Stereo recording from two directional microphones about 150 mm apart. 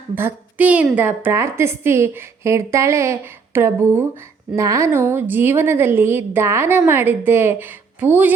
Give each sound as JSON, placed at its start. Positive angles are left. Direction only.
{"t": 0.2, "sound": "a woman's voice", "side_deg": -15}